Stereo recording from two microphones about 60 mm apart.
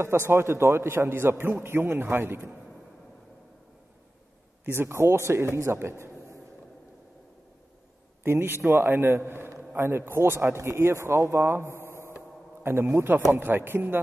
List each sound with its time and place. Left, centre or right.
0.0 s a man's voice: right
4.6 s speech: right
8.2 s a man's voice: right
12.6 s a man's voice: right